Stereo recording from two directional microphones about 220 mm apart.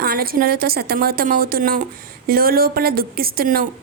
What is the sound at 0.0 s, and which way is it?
A woman's voice, 40° right (ahead or behind).